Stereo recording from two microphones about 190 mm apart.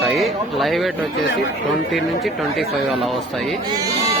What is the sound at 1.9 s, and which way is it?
Speech, centre (ahead or behind).